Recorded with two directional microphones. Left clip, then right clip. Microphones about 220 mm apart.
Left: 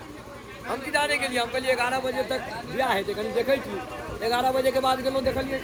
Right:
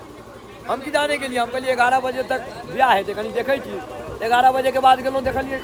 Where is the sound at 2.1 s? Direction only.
25° right (ahead or behind).